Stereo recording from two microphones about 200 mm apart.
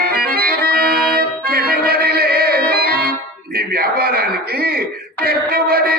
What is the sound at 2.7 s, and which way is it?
Organ, 50° right (ahead or behind).